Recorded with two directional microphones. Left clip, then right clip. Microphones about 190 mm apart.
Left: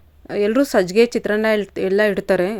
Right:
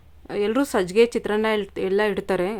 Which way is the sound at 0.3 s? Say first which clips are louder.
Left 5 dB; 15° left (ahead or behind).